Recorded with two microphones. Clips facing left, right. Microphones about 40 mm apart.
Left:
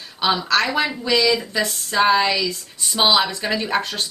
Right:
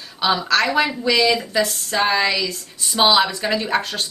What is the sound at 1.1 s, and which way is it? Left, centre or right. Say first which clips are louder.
Speech: even; centre.